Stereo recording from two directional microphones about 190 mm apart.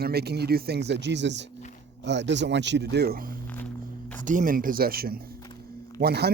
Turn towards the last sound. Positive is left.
turn(degrees=-55)  # may be behind; listen again after turning